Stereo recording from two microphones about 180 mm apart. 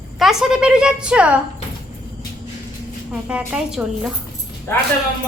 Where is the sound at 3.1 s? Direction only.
5° right (ahead or behind).